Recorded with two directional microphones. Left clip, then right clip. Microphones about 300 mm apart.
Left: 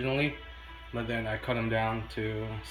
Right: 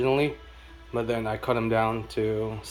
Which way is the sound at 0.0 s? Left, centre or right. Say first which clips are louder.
Right 6 dB; centre.